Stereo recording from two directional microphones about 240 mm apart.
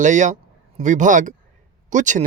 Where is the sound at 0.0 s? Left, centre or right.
Right.